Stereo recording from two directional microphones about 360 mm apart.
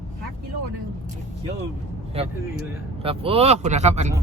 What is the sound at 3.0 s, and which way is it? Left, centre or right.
Speech, centre.